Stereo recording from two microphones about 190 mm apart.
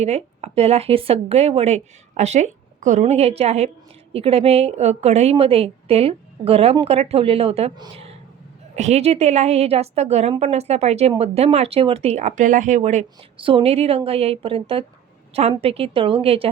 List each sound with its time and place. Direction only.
0.0 s a woman's voice: 35° right (ahead or behind)